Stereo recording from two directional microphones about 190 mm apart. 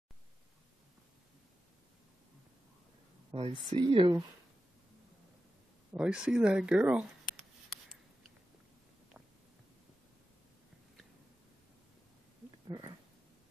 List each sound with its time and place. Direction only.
3.3 s a woman's voice: 30° right (ahead or behind)
5.9 s speech: 5° right (ahead or behind)
12.6 s a sound: 20° right (ahead or behind)